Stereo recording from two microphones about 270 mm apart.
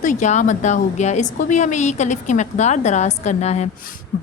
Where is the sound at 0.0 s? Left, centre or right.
Left.